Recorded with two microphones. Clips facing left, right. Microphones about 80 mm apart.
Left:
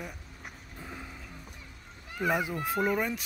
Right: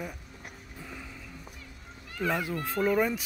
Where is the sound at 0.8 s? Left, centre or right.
Left.